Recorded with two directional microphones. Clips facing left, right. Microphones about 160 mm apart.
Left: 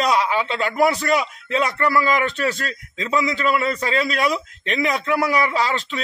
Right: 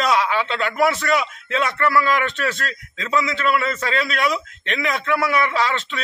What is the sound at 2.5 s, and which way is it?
Speech, 20° left (ahead or behind).